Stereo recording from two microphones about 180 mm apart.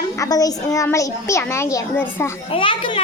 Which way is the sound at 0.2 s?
20° left (ahead or behind).